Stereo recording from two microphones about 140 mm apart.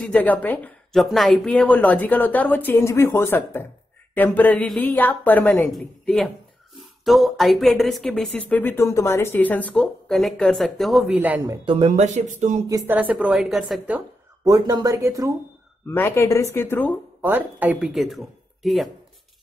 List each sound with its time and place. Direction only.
0.0 s a woman's voice: 10° left (ahead or behind)
0.9 s a woman's voice: centre (ahead or behind)
11.1 s a woman's voice: 10° right (ahead or behind)
11.6 s speech: 40° right (ahead or behind)
11.9 s speech: 60° right (ahead or behind)
12.8 s a woman's voice: 10° right (ahead or behind)
14.4 s speech: 25° right (ahead or behind)
15.9 s a woman's voice: 20° left (ahead or behind)
17.2 s speech: 15° right (ahead or behind)